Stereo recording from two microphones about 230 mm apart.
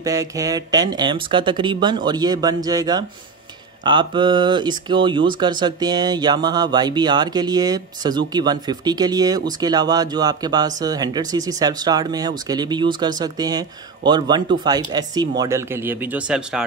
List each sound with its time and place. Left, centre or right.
0.0 s speech: centre